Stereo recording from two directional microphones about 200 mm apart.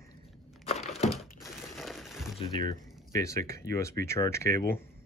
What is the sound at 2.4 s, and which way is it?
Speech, 20° left (ahead or behind).